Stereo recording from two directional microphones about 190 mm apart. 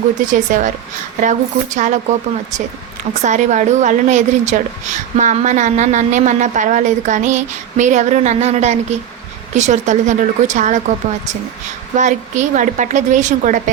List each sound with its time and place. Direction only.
0.3 s a woman's voice: 40° right (ahead or behind)
3.2 s a woman's voice: 40° right (ahead or behind)
11.9 s a woman's voice: 40° right (ahead or behind)